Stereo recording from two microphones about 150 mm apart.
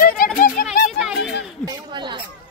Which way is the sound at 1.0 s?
5° right (ahead or behind).